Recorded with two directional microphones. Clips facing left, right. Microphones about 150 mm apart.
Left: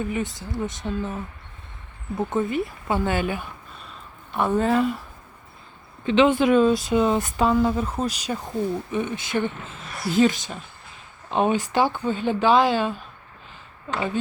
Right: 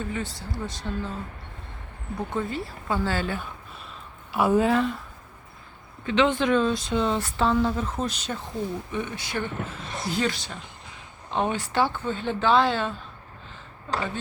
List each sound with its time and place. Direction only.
0.0 s speech: 15° left (ahead or behind)
4.3 s a woman's voice: 5° right (ahead or behind)
6.1 s speech: 20° left (ahead or behind)
9.8 s speech: 25° right (ahead or behind)
10.1 s speech: 20° left (ahead or behind)